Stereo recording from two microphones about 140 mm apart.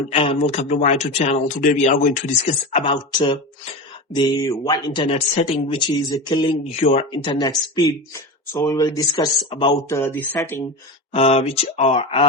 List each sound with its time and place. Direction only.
0.1 s speech: 40° left (ahead or behind)
2.8 s speech: 35° left (ahead or behind)
6.1 s speech: 25° left (ahead or behind); by 7.0 s 45° left (ahead or behind)
7.1 s speech: 35° left (ahead or behind)
9.9 s speech: 15° left (ahead or behind)
11.1 s speech: 45° left (ahead or behind)